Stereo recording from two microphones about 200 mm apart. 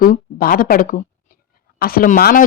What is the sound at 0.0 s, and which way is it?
A woman's voice, 45° left (ahead or behind).